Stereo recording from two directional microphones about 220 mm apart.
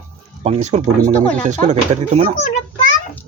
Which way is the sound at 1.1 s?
5° left (ahead or behind).